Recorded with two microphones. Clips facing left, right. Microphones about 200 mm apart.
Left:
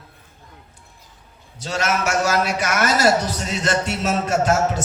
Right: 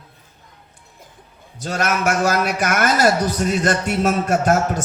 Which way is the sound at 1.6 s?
50° right (ahead or behind).